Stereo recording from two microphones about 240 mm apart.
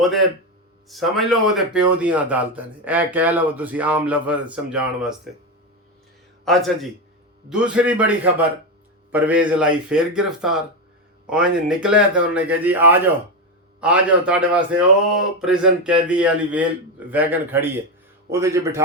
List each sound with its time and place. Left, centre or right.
0.9 s a man's voice: centre
6.4 s a man's voice: centre